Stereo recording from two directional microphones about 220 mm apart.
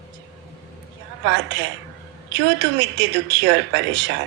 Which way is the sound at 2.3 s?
55° right (ahead or behind).